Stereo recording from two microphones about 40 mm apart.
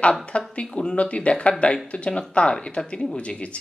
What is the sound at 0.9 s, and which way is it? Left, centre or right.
A woman's voice, left.